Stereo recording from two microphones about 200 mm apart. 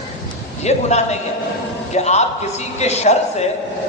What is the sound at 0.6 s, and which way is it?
A man's voice, 35° left (ahead or behind).